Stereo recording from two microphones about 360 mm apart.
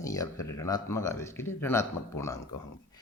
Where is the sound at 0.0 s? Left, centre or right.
Centre.